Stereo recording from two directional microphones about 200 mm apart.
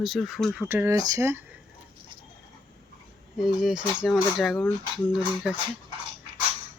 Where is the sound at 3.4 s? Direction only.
5° right (ahead or behind).